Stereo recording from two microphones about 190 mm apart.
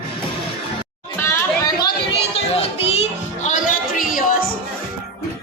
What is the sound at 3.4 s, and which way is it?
Music, 45° left (ahead or behind).